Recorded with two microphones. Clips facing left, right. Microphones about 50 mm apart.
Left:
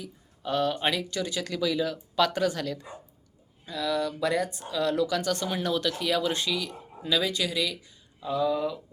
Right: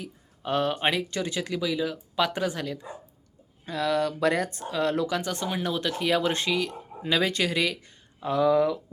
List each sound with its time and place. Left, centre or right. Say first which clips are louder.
0.0 s speech: right 1 dB; right
3.7 s speech: right 3 dB; right
8.3 s speech: right 5 dB; right